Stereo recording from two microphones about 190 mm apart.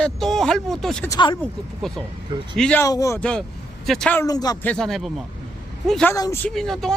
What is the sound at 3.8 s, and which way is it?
Speech, 5° left (ahead or behind).